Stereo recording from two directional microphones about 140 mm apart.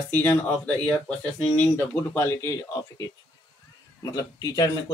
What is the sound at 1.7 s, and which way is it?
Speech, 20° left (ahead or behind).